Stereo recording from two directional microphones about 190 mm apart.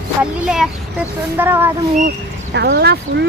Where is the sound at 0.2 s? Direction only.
5° right (ahead or behind).